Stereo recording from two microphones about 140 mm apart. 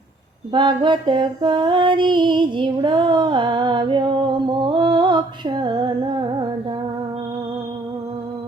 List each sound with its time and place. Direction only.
0.5 s female singing: 35° right (ahead or behind)